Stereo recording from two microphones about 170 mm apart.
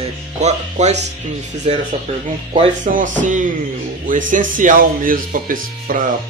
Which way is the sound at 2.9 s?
45° right (ahead or behind).